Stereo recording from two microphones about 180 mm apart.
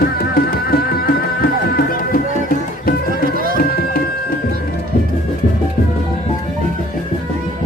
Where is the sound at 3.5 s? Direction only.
60° left (ahead or behind).